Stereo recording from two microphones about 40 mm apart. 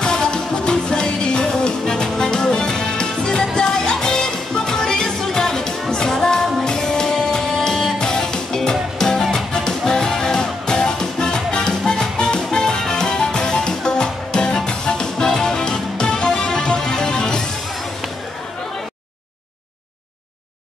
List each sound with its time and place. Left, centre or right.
0.0 s music: centre